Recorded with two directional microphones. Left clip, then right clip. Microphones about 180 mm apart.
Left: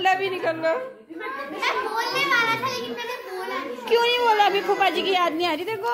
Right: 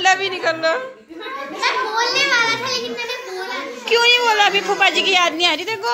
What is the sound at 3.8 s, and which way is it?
A woman's voice, 15° left (ahead or behind).